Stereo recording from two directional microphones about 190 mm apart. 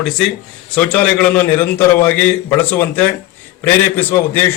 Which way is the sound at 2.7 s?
10° left (ahead or behind).